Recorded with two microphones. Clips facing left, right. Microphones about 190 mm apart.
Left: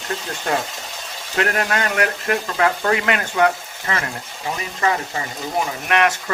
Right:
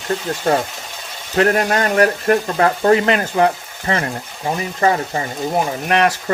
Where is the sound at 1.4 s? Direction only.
35° right (ahead or behind).